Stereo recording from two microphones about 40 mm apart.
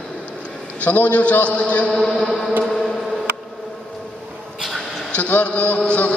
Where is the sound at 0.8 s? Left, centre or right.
Left.